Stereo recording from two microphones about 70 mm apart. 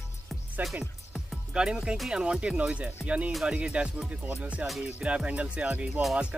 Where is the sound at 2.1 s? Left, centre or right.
Centre.